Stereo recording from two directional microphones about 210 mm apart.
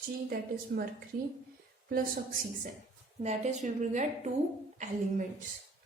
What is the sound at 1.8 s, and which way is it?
A woman's voice, 45° right (ahead or behind).